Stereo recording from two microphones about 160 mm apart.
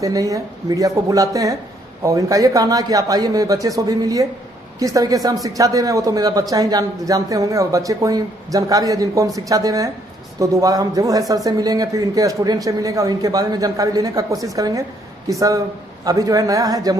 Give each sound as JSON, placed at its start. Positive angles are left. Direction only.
{"t": 0.0, "sound": "speech", "side_deg": -20}